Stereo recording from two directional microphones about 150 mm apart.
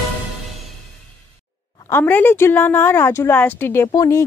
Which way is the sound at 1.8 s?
15° left (ahead or behind).